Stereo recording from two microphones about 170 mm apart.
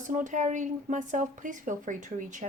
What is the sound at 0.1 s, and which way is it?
Speech, 45° right (ahead or behind).